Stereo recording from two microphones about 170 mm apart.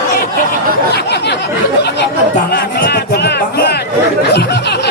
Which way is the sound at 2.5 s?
70° left (ahead or behind).